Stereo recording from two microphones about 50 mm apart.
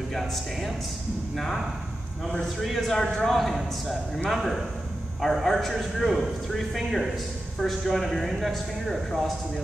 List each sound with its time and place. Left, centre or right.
0.1 s a man's voice: centre